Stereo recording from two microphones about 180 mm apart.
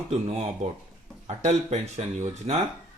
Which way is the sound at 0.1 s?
35° right (ahead or behind).